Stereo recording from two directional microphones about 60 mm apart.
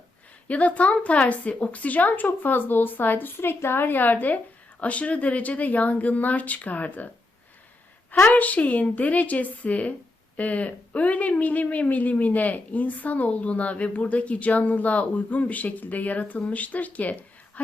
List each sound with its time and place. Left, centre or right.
0.4 s a woman's voice: left
8.3 s speech: left